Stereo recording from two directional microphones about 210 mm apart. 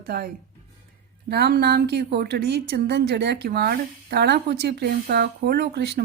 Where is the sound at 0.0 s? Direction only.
45° right (ahead or behind).